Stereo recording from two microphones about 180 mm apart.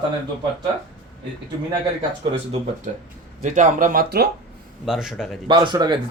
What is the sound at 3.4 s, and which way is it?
Speech, 40° right (ahead or behind).